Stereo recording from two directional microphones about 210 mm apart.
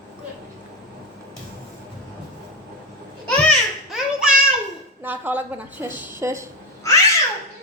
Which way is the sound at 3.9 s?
5° right (ahead or behind).